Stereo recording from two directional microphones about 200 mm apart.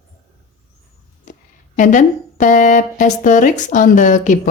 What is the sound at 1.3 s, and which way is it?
Speech, 40° left (ahead or behind).